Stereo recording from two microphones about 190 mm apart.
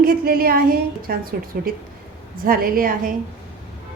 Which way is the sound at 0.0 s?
50° right (ahead or behind).